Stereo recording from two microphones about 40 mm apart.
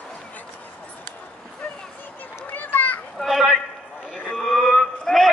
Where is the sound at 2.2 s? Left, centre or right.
Left.